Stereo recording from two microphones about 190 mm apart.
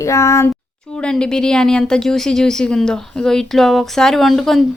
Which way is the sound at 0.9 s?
5° left (ahead or behind).